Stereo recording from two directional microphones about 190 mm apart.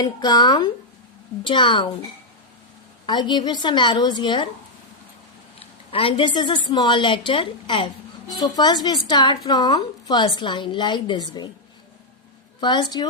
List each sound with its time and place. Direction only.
0.0 s a woman's voice: 20° left (ahead or behind)
3.1 s a woman's voice: 25° left (ahead or behind)
5.5 s a woman's voice: 30° left (ahead or behind)
12.5 s a woman's voice: 25° left (ahead or behind)